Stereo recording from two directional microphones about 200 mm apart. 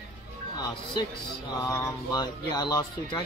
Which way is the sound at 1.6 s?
20° left (ahead or behind).